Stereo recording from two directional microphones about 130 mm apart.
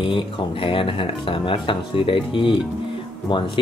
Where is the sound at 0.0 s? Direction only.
40° left (ahead or behind).